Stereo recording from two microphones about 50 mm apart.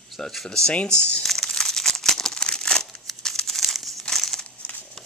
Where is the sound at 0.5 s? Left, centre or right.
Centre.